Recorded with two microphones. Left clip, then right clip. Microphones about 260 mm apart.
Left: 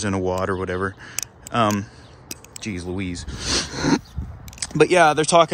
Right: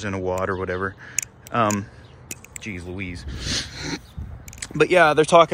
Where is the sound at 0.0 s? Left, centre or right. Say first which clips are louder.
Left 2 dB; centre; by 4.0 s left.